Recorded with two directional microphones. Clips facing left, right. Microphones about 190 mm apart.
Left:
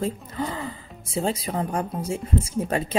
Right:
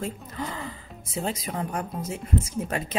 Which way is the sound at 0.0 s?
30° left (ahead or behind).